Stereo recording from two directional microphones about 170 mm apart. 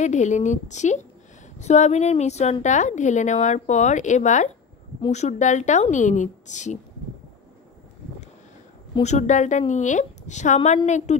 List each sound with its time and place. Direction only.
0.0 s a woman's voice: 45° left (ahead or behind)
9.0 s a woman's voice: 45° left (ahead or behind)